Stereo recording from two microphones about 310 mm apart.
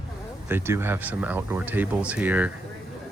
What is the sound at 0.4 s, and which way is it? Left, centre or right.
Speech, centre.